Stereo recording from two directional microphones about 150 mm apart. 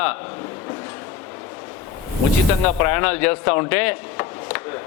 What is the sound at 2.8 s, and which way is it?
Chopping, 15° left (ahead or behind).